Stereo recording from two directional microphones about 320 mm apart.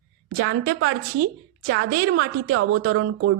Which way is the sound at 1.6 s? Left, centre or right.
Right.